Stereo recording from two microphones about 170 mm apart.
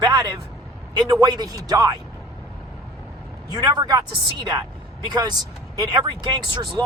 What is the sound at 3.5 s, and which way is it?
Speech, 20° right (ahead or behind).